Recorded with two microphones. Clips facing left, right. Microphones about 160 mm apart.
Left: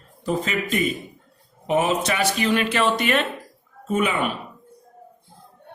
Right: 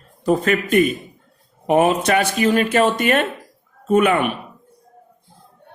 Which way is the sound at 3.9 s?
60° right (ahead or behind).